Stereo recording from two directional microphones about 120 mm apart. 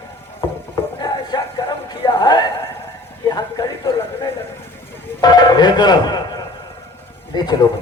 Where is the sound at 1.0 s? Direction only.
35° left (ahead or behind).